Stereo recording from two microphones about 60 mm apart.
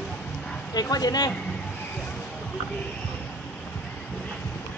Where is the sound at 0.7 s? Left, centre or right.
Left.